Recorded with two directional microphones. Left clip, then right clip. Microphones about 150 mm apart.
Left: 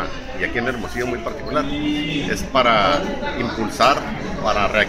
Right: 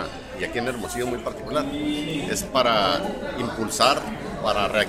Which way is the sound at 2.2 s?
20° right (ahead or behind).